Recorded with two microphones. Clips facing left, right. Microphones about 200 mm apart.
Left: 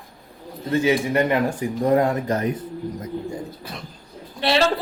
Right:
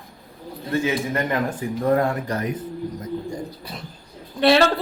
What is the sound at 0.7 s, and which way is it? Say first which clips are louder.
Speech: left 3 dB; 15° left (ahead or behind).